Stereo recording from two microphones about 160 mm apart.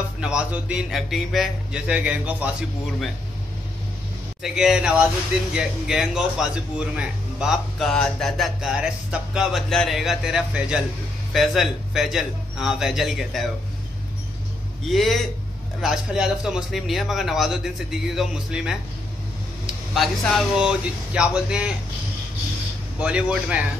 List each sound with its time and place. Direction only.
0.2 s a man's voice: 5° right (ahead or behind)
4.4 s a man's voice: 5° right (ahead or behind)
14.9 s a man's voice: centre (ahead or behind)
22.9 s a man's voice: 10° right (ahead or behind)